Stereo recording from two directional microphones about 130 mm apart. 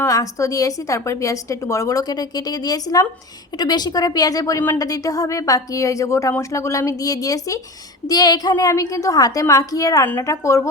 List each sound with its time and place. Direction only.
0.0 s a woman's voice: 25° left (ahead or behind)